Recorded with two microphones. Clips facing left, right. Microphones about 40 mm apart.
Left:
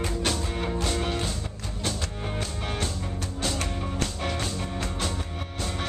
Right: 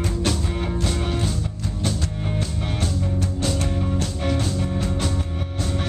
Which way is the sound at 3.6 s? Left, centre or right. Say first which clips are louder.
Right 5 dB; centre.